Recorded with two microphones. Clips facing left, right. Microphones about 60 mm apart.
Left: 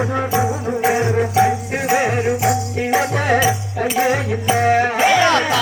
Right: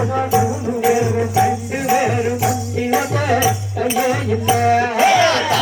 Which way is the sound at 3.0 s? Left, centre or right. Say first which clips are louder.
Left 1 dB; left.